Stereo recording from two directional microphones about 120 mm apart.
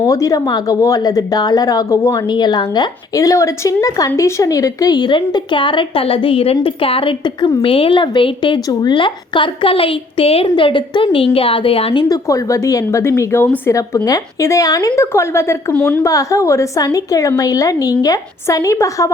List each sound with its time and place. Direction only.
0.0 s a woman's voice: 25° left (ahead or behind); by 11.9 s 55° left (ahead or behind)
11.9 s a woman's voice: 30° left (ahead or behind)
15.7 s a woman's voice: 10° left (ahead or behind)
16.0 s a woman's voice: 25° left (ahead or behind)